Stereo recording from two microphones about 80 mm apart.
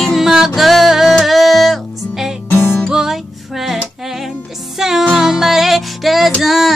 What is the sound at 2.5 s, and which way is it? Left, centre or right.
Music, left.